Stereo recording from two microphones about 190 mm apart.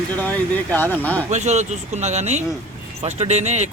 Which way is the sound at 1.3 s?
35° right (ahead or behind).